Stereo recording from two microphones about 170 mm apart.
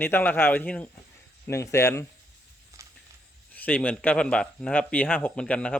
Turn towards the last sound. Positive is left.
turn(degrees=5)  # may be behind; listen again after turning